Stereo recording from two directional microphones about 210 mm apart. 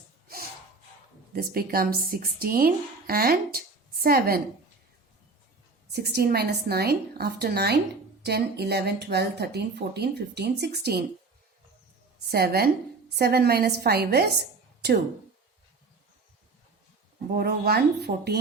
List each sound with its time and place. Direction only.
1.3 s speech: 45° right (ahead or behind)
5.9 s speech: 50° right (ahead or behind)
12.3 s speech: 50° right (ahead or behind)
17.3 s speech: 50° right (ahead or behind)